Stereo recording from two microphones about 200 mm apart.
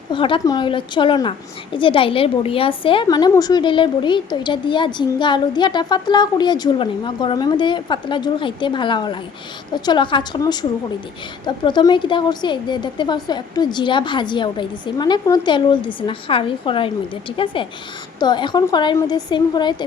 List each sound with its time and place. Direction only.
0.1 s a woman's voice: 25° left (ahead or behind)